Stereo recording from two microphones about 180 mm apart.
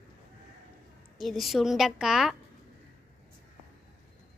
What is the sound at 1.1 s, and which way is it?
A woman's voice, centre (ahead or behind).